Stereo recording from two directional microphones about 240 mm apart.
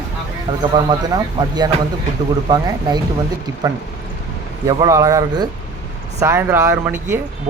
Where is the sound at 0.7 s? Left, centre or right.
Centre.